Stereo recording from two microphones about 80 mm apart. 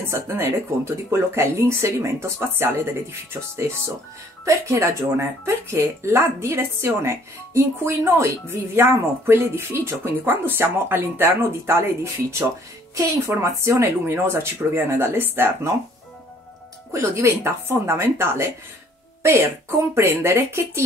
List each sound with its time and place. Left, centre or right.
0.0 s speech: right
16.9 s speech: right